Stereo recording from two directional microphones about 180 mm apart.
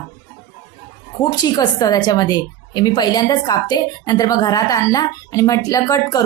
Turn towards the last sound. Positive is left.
turn(degrees=20)  # may be behind; listen again after turning